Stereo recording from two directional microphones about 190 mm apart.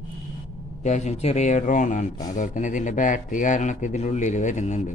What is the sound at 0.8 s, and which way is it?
Speech, 40° left (ahead or behind).